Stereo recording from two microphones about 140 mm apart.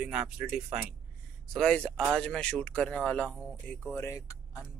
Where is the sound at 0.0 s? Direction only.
5° right (ahead or behind).